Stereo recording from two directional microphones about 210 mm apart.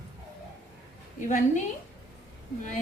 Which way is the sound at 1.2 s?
35° left (ahead or behind).